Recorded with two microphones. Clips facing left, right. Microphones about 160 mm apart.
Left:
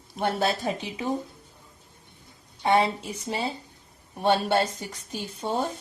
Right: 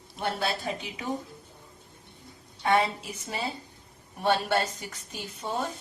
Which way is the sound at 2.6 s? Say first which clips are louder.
Left 3 dB; 25° left (ahead or behind).